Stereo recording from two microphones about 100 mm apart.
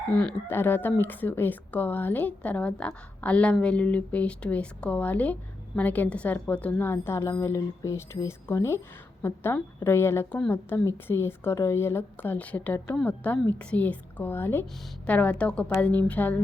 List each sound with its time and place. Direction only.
0.1 s speech: 10° left (ahead or behind)
0.4 s a woman's voice: 20° left (ahead or behind)